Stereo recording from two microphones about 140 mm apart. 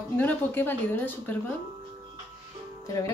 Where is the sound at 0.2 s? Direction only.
15° left (ahead or behind).